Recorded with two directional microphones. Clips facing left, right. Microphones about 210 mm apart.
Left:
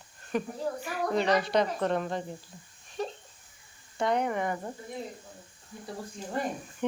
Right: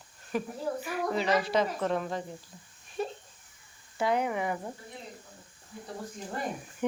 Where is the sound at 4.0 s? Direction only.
5° right (ahead or behind).